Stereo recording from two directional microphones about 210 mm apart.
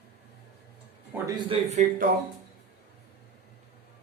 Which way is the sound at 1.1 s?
10° right (ahead or behind).